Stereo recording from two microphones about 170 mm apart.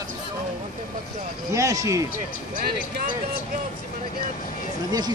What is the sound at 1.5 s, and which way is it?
Speech, 20° right (ahead or behind).